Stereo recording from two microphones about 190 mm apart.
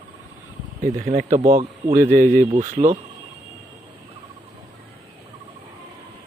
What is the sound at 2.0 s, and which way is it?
Speech, 45° right (ahead or behind).